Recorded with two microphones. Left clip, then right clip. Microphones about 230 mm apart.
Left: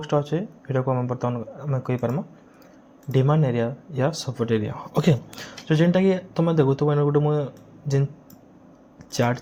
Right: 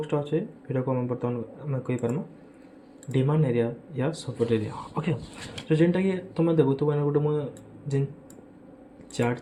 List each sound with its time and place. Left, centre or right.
0.0 s speech: left
9.1 s speech: left